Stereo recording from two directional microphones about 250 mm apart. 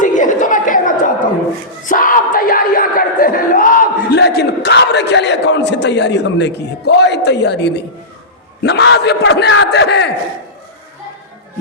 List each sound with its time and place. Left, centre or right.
0.0 s a sound: left
1.9 s crowd: left
8.6 s a man's voice: left